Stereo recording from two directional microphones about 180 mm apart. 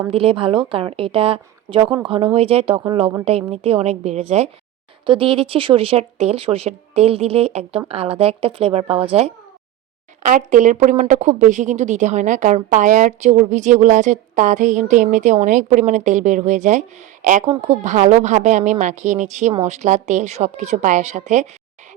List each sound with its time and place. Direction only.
0.1 s a woman's voice: 30° right (ahead or behind)
10.2 s a woman's voice: 45° right (ahead or behind)